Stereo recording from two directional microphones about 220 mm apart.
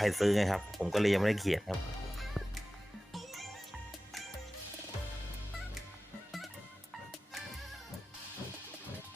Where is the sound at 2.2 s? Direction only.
Centre (ahead or behind).